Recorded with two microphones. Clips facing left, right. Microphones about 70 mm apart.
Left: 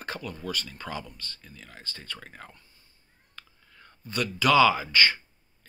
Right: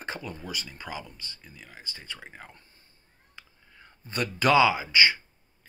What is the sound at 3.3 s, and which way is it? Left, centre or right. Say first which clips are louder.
Whispering: left 1 dB; centre.